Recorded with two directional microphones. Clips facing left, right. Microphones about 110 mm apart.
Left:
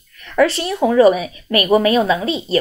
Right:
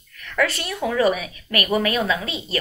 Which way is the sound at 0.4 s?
30° left (ahead or behind).